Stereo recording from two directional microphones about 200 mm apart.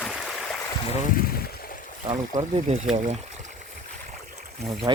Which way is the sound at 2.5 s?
40° right (ahead or behind).